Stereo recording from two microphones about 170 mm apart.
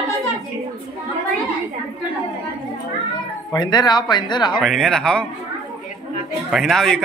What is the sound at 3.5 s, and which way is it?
Speech, 25° left (ahead or behind).